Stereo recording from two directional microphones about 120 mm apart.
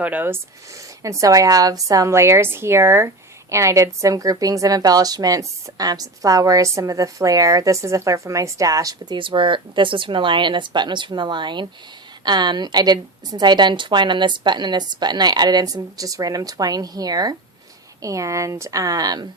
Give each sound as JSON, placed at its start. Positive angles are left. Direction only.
{"t": 0.0, "sound": "a woman's voice", "side_deg": -15}